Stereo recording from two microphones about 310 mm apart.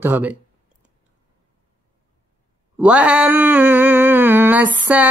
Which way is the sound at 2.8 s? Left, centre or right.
Centre.